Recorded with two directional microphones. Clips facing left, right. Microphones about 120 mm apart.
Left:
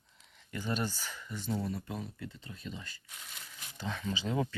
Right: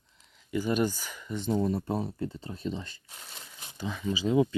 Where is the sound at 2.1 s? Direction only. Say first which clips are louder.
Right 10 dB; 35° right (ahead or behind).